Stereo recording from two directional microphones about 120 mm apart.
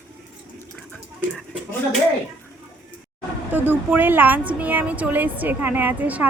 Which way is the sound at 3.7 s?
15° right (ahead or behind).